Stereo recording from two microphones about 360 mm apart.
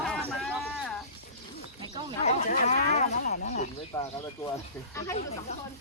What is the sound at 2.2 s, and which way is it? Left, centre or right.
Speech, centre.